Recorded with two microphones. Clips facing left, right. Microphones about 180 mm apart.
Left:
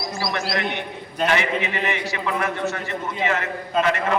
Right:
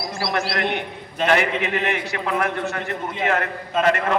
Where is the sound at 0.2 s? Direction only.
65° right (ahead or behind).